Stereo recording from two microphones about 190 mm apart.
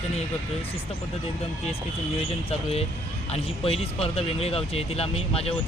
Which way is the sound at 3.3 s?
30° left (ahead or behind).